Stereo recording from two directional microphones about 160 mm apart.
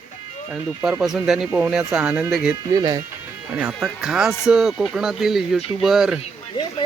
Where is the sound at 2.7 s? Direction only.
25° right (ahead or behind).